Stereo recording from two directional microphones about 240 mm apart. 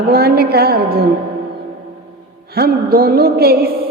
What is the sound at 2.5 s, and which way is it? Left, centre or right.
A man's voice, right.